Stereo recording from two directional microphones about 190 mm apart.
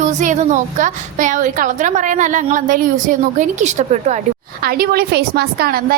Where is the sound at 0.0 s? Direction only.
40° right (ahead or behind).